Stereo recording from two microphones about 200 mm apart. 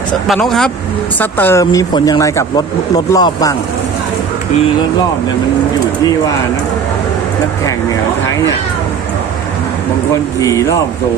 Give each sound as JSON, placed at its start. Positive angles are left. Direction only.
{"t": 0.3, "sound": "speech", "side_deg": 0}
{"t": 10.4, "sound": "speech", "side_deg": 15}